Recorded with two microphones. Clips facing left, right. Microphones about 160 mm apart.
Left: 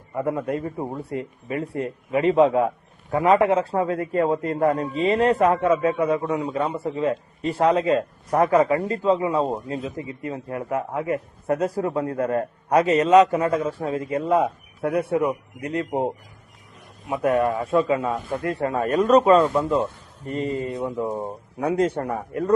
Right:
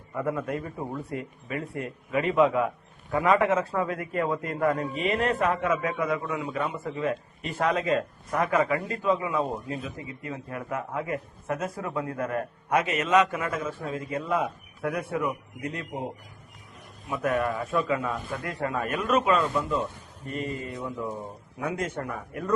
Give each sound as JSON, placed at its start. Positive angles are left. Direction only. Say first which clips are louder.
{"t": 0.2, "sound": "a man's voice", "louder": "left 5 dB", "side_deg": 30}
{"t": 17.1, "sound": "speech", "louder": "left 6 dB", "side_deg": 25}
{"t": 21.1, "sound": "speech", "louder": "left 7 dB", "side_deg": 50}
{"t": 21.7, "sound": "a man's voice", "louder": "left 10 dB", "side_deg": 35}